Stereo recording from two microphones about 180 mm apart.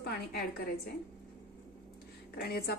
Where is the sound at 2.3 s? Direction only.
60° left (ahead or behind).